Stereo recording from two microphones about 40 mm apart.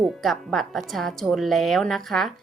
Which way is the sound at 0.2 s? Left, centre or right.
Centre.